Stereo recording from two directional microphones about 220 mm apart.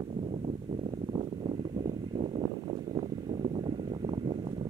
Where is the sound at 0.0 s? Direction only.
25° right (ahead or behind).